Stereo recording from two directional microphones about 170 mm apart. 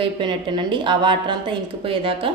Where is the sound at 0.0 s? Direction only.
30° right (ahead or behind).